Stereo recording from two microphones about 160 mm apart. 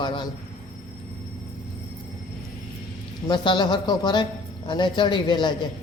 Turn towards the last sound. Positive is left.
turn(degrees=30)  # may be behind; listen again after turning